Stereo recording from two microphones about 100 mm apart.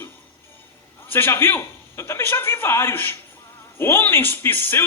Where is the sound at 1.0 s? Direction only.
20° left (ahead or behind).